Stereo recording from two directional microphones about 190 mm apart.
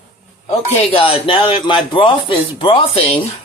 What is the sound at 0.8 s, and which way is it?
Speech, 30° left (ahead or behind).